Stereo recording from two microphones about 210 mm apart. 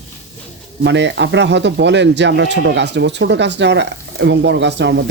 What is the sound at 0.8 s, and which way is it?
Speech, 55° right (ahead or behind).